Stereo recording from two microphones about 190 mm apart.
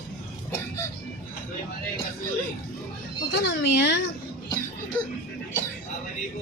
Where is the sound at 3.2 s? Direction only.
65° left (ahead or behind).